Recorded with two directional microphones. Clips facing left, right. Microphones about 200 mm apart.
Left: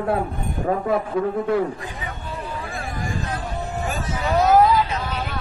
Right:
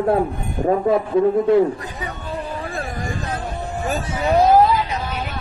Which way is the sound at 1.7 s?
40° right (ahead or behind).